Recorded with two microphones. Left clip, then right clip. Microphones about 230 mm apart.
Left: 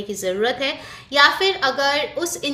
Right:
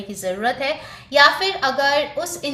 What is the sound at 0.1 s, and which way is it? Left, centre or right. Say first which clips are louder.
A woman's voice: left 1 dB; left.